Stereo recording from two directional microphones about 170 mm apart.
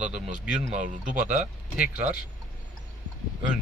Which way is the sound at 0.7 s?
45° right (ahead or behind).